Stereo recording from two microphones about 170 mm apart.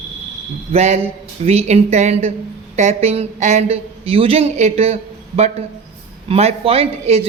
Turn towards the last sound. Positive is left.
turn(degrees=-35)  # may be behind; listen again after turning